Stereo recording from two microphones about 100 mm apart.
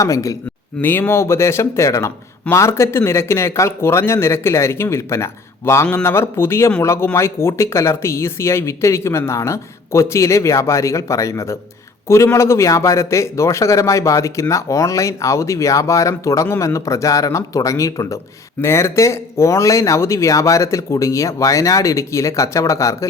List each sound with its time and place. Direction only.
0.0 s a man's voice: 35° left (ahead or behind)
0.8 s a man's voice: 20° left (ahead or behind)